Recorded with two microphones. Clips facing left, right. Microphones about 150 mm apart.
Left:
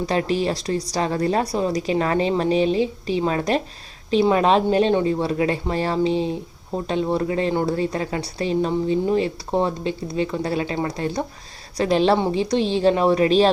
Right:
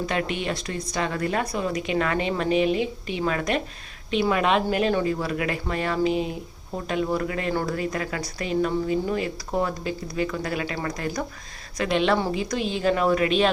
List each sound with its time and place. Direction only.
0.0 s a woman's voice: 35° left (ahead or behind)